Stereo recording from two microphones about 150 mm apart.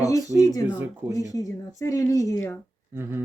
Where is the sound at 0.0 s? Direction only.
25° left (ahead or behind).